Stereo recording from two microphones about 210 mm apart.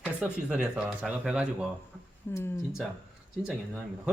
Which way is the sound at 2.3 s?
10° left (ahead or behind).